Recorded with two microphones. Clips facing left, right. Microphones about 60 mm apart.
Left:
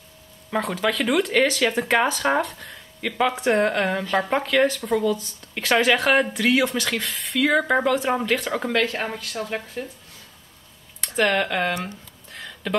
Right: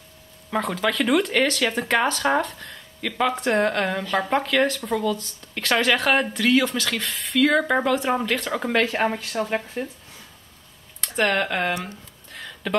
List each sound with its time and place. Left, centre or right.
0.5 s speech: centre
8.7 s speech: centre
11.0 s speech: centre